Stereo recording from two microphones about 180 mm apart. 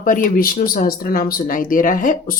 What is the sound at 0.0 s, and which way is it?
Speech, 50° left (ahead or behind).